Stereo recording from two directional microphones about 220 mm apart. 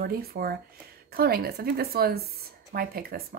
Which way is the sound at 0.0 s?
45° right (ahead or behind).